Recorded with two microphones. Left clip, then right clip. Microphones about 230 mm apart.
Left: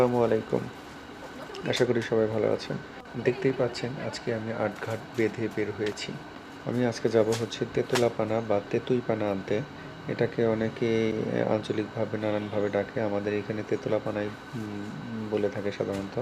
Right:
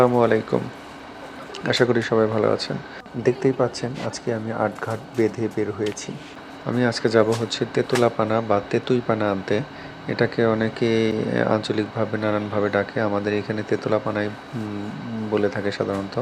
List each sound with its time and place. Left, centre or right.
0.0 s speech: centre
1.6 s speech: centre
6.7 s speech: centre
15.4 s speech: centre